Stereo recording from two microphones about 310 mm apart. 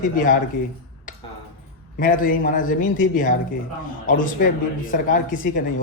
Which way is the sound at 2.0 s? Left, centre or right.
Left.